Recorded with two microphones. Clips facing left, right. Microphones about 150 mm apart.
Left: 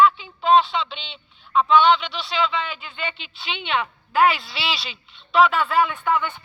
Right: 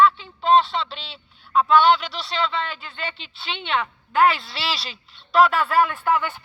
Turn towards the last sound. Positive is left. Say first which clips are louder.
# right 1 dB
turn(degrees=-5)  # may be behind; listen again after turning